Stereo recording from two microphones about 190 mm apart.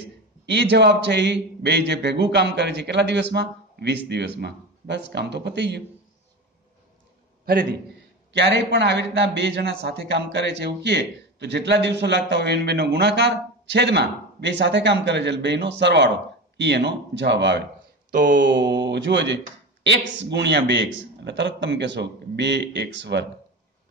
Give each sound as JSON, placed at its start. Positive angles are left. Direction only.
{"t": 0.5, "sound": "speech", "side_deg": -65}
{"t": 8.3, "sound": "speech", "side_deg": -65}
{"t": 18.1, "sound": "mantra", "side_deg": -45}
{"t": 18.5, "sound": "speech", "side_deg": -70}